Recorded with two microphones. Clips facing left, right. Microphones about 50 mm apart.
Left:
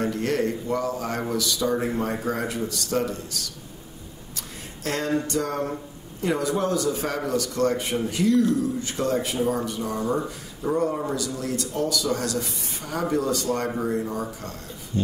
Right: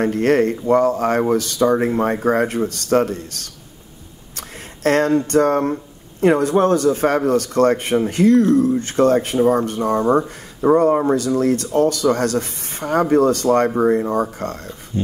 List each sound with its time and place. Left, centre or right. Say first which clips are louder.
0.0 s speech: right 8 dB; right